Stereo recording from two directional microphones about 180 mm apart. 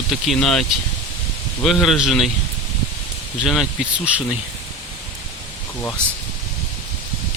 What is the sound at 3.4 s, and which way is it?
Speech, centre (ahead or behind).